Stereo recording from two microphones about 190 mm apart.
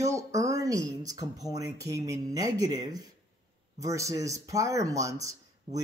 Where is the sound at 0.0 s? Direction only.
15° right (ahead or behind).